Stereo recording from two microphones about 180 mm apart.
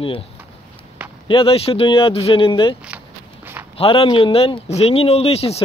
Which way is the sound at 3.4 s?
10° right (ahead or behind).